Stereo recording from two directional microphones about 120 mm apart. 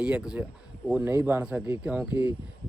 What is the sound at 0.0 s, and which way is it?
Speech, 10° right (ahead or behind).